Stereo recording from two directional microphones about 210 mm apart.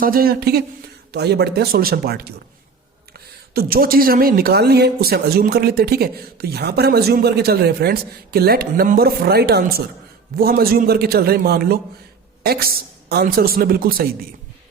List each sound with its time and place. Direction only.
0.0 s speech: 45° right (ahead or behind)
3.5 s speech: 45° right (ahead or behind)